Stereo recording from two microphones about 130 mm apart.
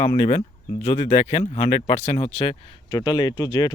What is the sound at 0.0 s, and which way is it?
Speech, 65° left (ahead or behind).